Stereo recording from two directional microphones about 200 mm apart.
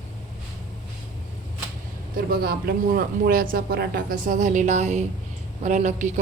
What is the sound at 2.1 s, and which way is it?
A woman's voice, 50° right (ahead or behind).